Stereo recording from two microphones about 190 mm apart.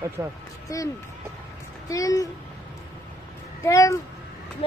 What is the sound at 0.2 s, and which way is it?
Speech, 20° right (ahead or behind).